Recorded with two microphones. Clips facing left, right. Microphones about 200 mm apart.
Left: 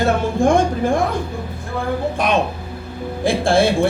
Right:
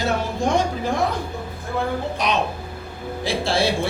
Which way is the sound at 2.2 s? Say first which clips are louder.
Left 4 dB; 50° left (ahead or behind).